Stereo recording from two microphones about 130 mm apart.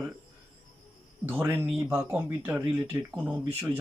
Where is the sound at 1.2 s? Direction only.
15° right (ahead or behind).